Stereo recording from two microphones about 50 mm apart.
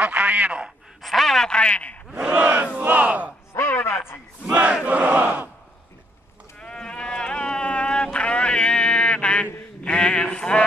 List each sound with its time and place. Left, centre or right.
0.0 s a man's voice: right
1.0 s speech: centre; by 2.0 s left
2.3 s crowd: right
3.8 s speech: left
4.5 s crowd: right
6.6 s sheep: centre